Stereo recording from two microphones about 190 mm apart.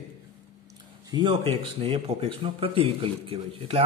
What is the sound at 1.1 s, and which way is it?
A man's voice, 25° right (ahead or behind).